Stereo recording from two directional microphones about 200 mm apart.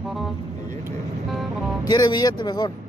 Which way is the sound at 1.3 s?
Centre (ahead or behind).